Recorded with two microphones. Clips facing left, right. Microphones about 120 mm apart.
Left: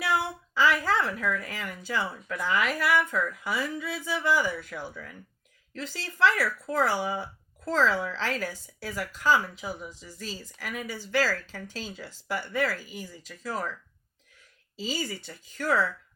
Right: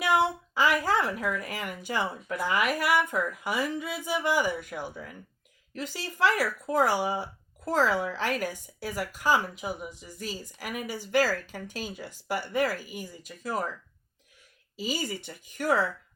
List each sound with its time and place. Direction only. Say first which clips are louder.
0.0 s a woman's voice: right 4 dB; 20° right (ahead or behind)
14.8 s a woman's voice: right 1 dB; 15° right (ahead or behind)